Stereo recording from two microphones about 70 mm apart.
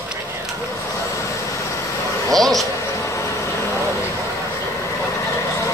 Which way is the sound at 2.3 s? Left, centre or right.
Centre.